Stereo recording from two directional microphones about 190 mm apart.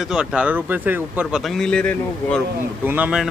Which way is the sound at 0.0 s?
5° right (ahead or behind).